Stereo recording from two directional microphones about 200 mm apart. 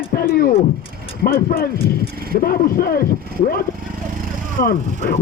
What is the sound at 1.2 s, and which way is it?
Speech, 45° left (ahead or behind).